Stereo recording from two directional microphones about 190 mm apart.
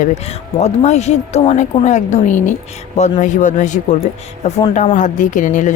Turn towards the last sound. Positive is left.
turn(degrees=40)  # may be behind; listen again after turning